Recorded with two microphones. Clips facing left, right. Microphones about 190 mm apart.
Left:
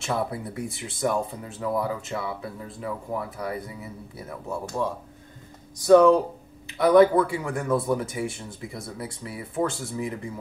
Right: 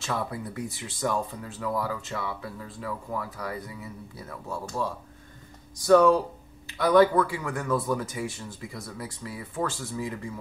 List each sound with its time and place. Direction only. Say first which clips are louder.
0.0 s speech: left 3 dB; 25° left (ahead or behind)